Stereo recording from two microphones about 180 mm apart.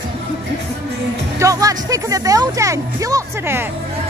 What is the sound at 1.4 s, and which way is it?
Speech, 20° right (ahead or behind).